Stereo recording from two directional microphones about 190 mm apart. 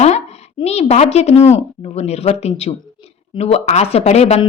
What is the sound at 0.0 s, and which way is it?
A woman's voice, 35° left (ahead or behind).